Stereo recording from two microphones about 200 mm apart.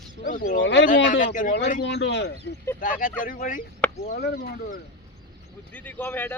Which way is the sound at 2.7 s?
45° left (ahead or behind).